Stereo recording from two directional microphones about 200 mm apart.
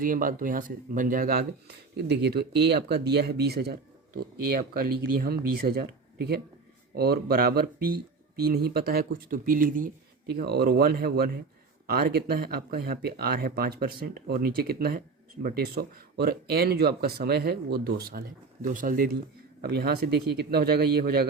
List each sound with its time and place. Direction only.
0.0 s speech: 45° right (ahead or behind)